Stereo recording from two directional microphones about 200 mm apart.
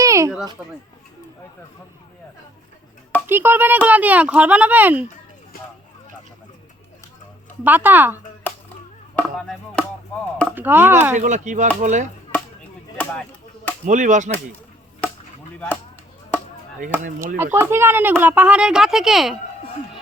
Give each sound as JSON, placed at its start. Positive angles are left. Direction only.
{"t": 0.0, "sound": "a sound", "side_deg": -15}
{"t": 3.2, "sound": "speech", "side_deg": -10}
{"t": 7.6, "sound": "speech", "side_deg": -10}
{"t": 9.1, "sound": "chop", "side_deg": 5}
{"t": 10.5, "sound": "speech", "side_deg": -10}
{"t": 11.1, "sound": "speech", "side_deg": -40}
{"t": 13.0, "sound": "a sound", "side_deg": 10}
{"t": 13.8, "sound": "speech", "side_deg": -40}
{"t": 15.0, "sound": "chop", "side_deg": 10}
{"t": 15.5, "sound": "speech", "side_deg": 5}
{"t": 17.3, "sound": "speech", "side_deg": -10}